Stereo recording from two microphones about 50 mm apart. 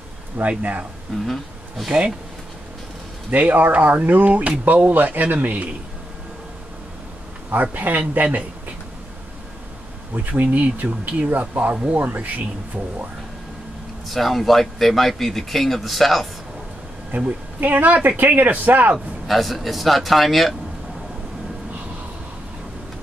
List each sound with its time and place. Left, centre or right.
0.4 s speech: right
1.2 s speech: centre
3.3 s speech: right
7.7 s speech: right
10.1 s speech: right
14.0 s speech: centre
17.1 s speech: right
19.2 s speech: centre